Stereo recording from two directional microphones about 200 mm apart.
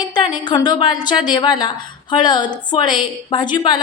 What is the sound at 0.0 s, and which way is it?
A woman's voice, 20° left (ahead or behind).